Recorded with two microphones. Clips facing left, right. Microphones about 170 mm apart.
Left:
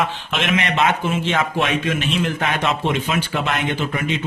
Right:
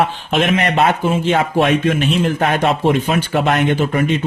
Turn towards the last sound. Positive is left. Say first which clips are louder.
# right 7 dB
turn(degrees=-50)  # may be behind; listen again after turning